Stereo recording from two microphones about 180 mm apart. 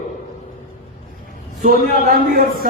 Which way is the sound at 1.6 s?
55° right (ahead or behind).